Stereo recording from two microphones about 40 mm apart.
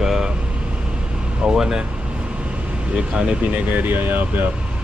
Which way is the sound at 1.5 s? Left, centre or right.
Centre.